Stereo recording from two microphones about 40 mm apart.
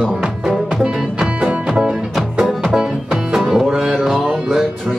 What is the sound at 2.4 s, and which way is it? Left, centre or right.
Music, centre.